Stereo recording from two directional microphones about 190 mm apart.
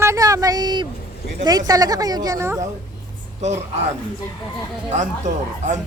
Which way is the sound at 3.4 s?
35° right (ahead or behind).